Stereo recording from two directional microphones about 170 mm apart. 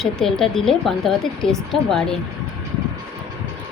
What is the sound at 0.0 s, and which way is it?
Speech, centre (ahead or behind).